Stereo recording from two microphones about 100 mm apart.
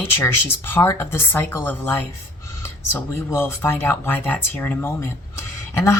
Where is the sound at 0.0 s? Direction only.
20° left (ahead or behind).